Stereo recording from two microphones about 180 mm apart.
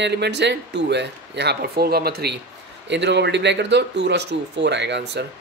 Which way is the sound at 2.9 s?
75° right (ahead or behind).